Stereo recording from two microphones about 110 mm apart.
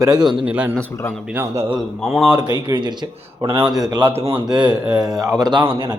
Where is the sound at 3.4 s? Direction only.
55° right (ahead or behind).